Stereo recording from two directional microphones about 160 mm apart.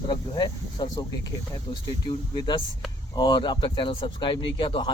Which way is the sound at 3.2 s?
30° left (ahead or behind).